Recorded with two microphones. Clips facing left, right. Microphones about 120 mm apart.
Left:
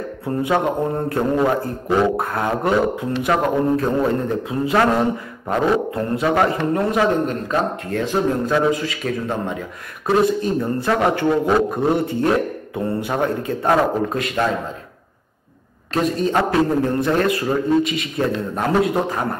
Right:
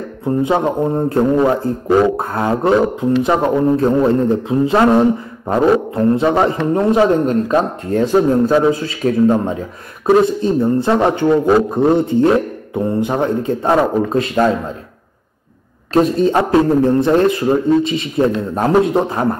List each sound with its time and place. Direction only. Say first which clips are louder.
0.2 s mantra: right 4 dB; 20° right (ahead or behind)
2.1 s speech: right 3 dB; 25° right (ahead or behind)
15.9 s speech: right 6 dB; 30° right (ahead or behind)